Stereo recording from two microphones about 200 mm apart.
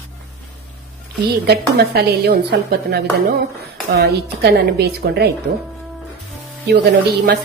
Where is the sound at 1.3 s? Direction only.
50° right (ahead or behind).